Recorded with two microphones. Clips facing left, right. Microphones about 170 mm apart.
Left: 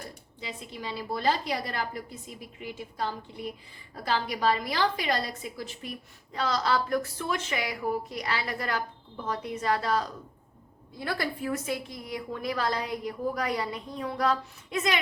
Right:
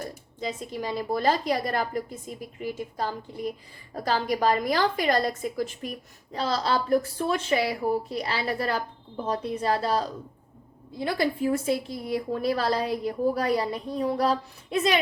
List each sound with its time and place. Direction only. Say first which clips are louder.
0.3 s a woman's voice: right 8 dB; 45° right (ahead or behind)
6.3 s a woman's voice: right 1 dB; 30° right (ahead or behind)